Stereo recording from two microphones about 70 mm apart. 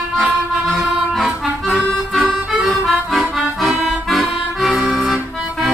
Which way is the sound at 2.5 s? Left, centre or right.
Centre.